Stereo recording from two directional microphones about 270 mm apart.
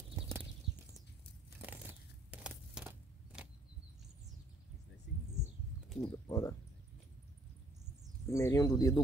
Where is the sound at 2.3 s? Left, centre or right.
Centre.